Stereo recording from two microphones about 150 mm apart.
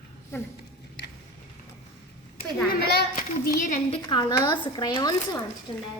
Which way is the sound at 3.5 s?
60° left (ahead or behind).